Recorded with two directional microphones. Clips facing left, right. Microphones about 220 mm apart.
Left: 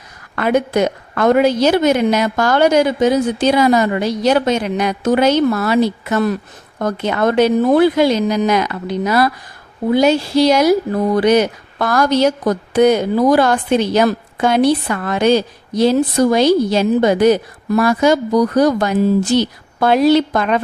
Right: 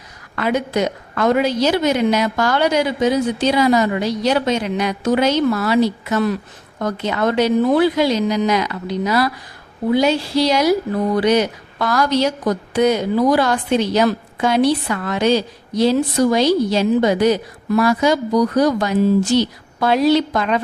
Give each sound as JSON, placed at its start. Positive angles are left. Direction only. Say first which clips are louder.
{"t": 0.3, "sound": "speech", "louder": "left 4 dB", "side_deg": 55}